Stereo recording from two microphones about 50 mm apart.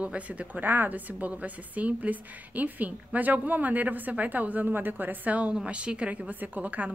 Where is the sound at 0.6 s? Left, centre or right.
Right.